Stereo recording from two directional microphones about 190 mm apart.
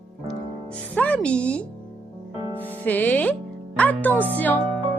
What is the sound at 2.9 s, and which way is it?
Speech, 10° left (ahead or behind).